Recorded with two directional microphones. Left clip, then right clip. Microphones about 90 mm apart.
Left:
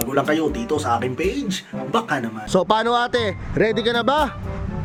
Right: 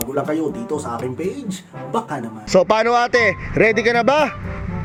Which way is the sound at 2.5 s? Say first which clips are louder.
Right 4 dB; 15° left (ahead or behind).